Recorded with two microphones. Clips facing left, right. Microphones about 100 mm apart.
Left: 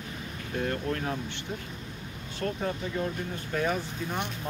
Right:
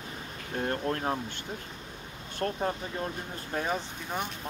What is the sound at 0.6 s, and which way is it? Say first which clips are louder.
Speech: even; 35° right (ahead or behind).